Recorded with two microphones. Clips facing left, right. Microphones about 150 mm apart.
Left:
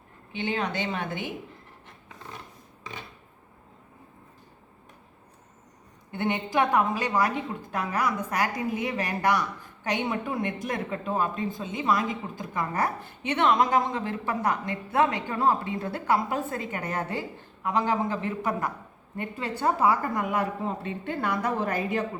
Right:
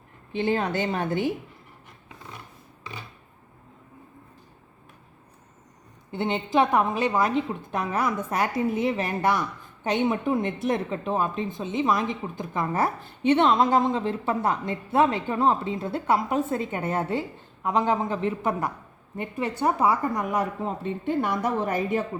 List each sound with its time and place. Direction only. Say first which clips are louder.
0.3 s speech: right 5 dB; 35° right (ahead or behind)
6.1 s speech: right 3 dB; 25° right (ahead or behind)